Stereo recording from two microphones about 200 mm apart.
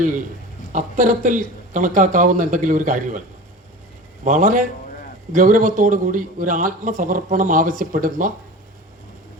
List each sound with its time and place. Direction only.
0.7 s speech: 40° right (ahead or behind)